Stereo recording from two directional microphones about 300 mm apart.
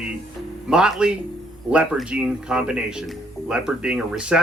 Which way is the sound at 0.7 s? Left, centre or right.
Centre.